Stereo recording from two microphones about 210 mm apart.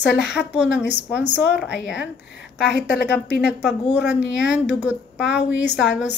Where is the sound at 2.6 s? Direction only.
50° left (ahead or behind).